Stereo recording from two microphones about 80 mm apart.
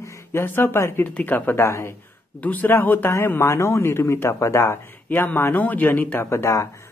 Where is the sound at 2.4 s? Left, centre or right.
Left.